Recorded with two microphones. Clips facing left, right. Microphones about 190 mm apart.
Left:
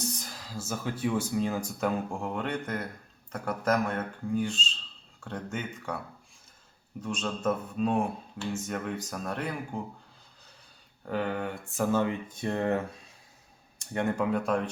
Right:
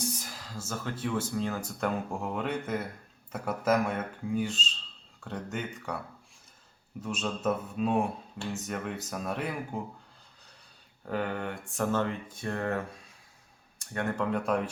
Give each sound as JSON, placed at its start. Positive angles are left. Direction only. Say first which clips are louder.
{"t": 0.0, "sound": "a sound", "louder": "even", "side_deg": -10}
{"t": 0.7, "sound": "speech", "louder": "left 3 dB", "side_deg": 10}
{"t": 1.8, "sound": "speech", "louder": "even", "side_deg": 0}
{"t": 7.0, "sound": "speech", "louder": "left 1 dB", "side_deg": -5}
{"t": 11.0, "sound": "speech", "louder": "left 1 dB", "side_deg": 0}
{"t": 13.9, "sound": "speech", "louder": "left 3 dB", "side_deg": 15}
{"t": 14.3, "sound": "speech", "louder": "left 1 dB", "side_deg": 0}